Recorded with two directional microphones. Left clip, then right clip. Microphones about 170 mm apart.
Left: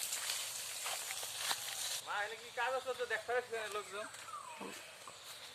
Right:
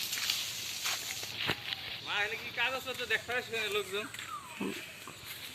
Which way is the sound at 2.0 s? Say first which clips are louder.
Right 7 dB; 25° left (ahead or behind).